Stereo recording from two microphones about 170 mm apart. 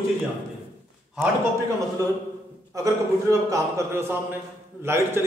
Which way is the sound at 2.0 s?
20° right (ahead or behind).